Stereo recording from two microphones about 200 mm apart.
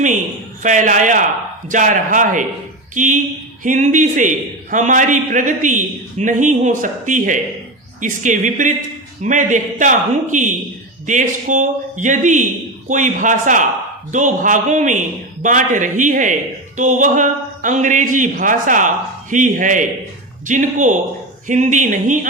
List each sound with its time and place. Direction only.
0.6 s a man's voice: 40° right (ahead or behind)